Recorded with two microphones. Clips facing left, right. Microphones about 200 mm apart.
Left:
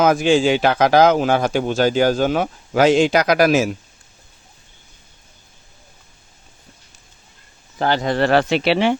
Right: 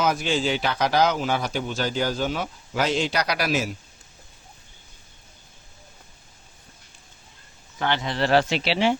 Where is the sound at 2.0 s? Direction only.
55° left (ahead or behind); by 3.1 s 90° left.